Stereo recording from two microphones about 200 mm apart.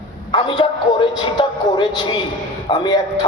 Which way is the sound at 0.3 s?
25° left (ahead or behind).